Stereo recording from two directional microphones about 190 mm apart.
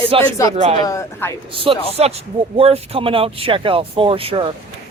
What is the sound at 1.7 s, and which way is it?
Speech, 30° right (ahead or behind).